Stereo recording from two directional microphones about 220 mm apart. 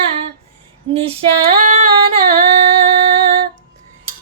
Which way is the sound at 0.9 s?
25° right (ahead or behind).